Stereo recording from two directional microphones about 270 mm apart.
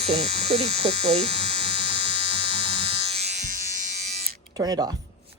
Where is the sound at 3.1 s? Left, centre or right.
Right.